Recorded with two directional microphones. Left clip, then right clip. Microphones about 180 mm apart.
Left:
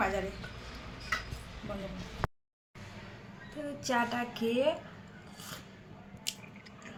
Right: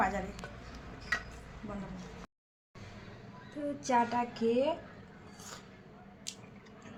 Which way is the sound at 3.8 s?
Centre (ahead or behind).